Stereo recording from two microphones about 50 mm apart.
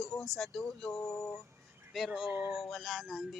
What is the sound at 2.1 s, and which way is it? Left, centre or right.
Music, centre.